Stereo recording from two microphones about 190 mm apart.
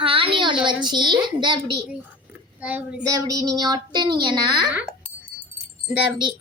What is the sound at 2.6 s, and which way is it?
Speech, 5° right (ahead or behind).